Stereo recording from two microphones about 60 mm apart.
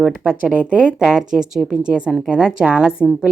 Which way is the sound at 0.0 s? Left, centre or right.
Right.